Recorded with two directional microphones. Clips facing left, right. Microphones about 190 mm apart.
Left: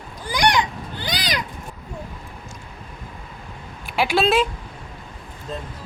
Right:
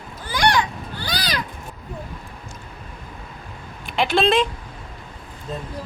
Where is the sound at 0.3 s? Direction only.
15° left (ahead or behind).